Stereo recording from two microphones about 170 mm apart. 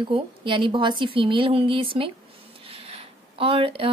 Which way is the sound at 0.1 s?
30° right (ahead or behind).